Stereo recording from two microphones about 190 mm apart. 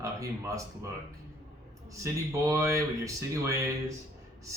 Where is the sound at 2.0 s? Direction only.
15° right (ahead or behind).